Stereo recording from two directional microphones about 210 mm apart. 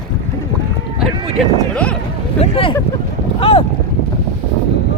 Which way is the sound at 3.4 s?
25° left (ahead or behind).